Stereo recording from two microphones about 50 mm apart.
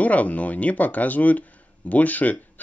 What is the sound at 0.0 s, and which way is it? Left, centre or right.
Speech, left.